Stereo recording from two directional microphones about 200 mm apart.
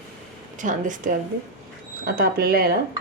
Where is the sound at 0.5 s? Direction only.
40° right (ahead or behind).